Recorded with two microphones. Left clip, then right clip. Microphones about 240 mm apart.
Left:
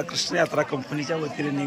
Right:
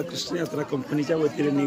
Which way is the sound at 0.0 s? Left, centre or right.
Centre.